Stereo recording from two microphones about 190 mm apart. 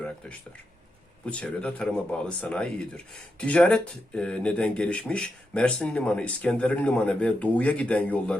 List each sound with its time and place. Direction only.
1.2 s speech: 5° left (ahead or behind)